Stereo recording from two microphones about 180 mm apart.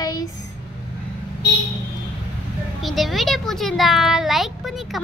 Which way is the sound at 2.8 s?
Centre (ahead or behind).